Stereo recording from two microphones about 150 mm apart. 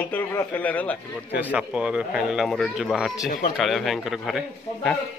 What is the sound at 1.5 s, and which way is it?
Speech, 10° right (ahead or behind).